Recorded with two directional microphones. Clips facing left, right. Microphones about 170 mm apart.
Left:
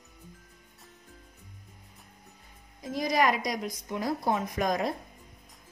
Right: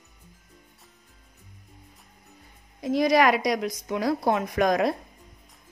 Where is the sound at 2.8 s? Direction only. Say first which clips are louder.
Right 6 dB; 75° right (ahead or behind).